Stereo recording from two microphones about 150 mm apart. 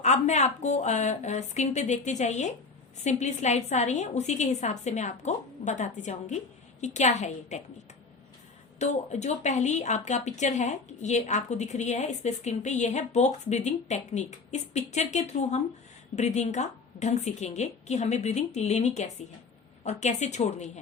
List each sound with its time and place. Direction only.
0.0 s speech: 50° left (ahead or behind)
8.8 s speech: 50° left (ahead or behind)